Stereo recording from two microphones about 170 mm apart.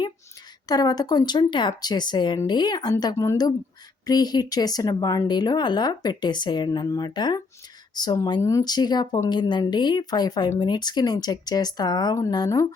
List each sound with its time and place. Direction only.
0.7 s speech: 20° left (ahead or behind)